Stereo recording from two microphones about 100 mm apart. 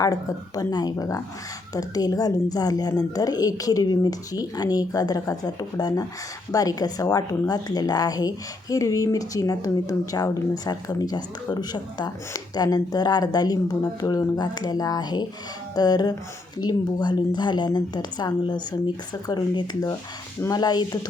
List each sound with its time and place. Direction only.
0.0 s a woman's voice: 35° left (ahead or behind)